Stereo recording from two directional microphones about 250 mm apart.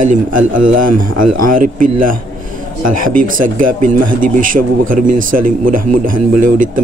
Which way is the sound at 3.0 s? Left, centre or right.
Right.